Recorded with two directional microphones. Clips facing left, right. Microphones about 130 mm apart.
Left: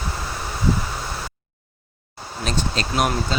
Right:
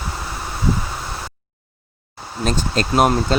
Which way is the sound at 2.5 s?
45° right (ahead or behind).